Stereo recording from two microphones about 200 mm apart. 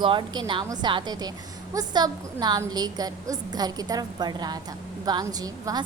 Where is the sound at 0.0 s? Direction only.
25° right (ahead or behind).